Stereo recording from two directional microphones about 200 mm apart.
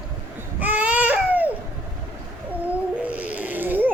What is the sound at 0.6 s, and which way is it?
Baby cry, 5° right (ahead or behind).